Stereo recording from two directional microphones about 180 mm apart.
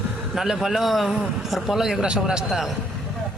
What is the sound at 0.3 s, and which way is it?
A man's voice, centre (ahead or behind).